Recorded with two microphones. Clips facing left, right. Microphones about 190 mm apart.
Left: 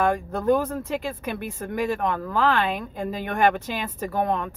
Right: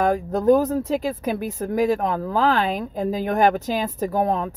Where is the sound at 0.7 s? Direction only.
40° right (ahead or behind).